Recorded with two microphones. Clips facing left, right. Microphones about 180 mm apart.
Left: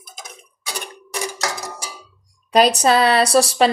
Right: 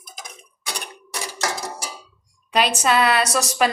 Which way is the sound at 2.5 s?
40° left (ahead or behind).